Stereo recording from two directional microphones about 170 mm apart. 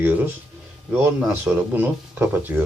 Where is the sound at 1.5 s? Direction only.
5° right (ahead or behind).